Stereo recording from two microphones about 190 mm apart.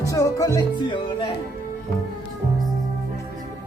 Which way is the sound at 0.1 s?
15° left (ahead or behind).